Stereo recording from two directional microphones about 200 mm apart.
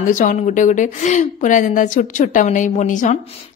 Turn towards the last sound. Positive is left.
turn(degrees=40)  # may be behind; listen again after turning